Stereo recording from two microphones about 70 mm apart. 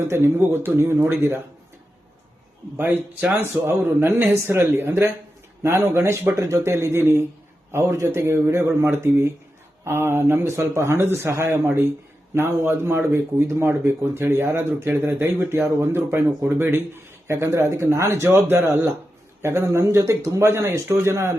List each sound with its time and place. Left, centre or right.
0.1 s a man's voice: right
2.7 s speech: right
3.3 s a man's voice: right